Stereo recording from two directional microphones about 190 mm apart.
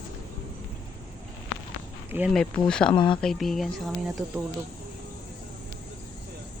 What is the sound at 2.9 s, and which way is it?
Speech, 25° left (ahead or behind).